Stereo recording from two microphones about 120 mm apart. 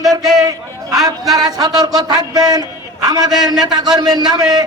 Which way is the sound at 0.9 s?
Centre (ahead or behind).